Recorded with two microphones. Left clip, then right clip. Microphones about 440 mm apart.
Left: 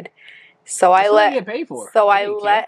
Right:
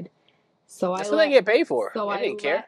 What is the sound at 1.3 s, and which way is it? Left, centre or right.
Speech, right.